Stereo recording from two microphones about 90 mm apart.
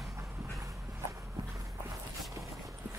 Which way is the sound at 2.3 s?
35° right (ahead or behind).